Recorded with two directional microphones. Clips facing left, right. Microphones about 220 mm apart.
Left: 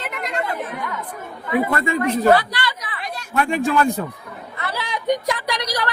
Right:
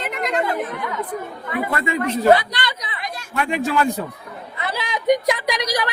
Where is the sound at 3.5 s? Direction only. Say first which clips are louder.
Left 1 dB; 50° left (ahead or behind).